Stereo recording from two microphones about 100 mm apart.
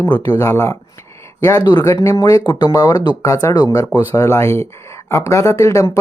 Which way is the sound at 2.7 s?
35° left (ahead or behind).